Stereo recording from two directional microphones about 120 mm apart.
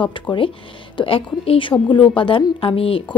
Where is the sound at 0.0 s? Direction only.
45° left (ahead or behind).